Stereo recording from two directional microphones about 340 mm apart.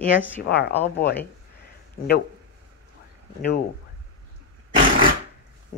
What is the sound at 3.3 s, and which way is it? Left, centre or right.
Speech, left.